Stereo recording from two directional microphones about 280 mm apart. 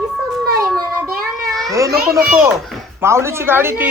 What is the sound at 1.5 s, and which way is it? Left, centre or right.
Cat, centre.